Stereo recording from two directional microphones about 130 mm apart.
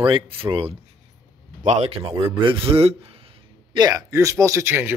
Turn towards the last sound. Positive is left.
turn(degrees=-20)  # may be behind; listen again after turning